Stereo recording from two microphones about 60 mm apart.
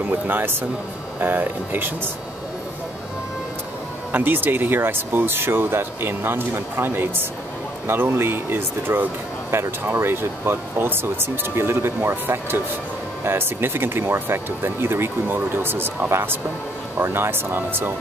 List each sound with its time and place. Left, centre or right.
0.1 s speech: right
4.1 s speech: right